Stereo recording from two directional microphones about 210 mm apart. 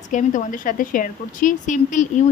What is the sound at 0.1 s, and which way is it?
A woman's voice, 35° left (ahead or behind).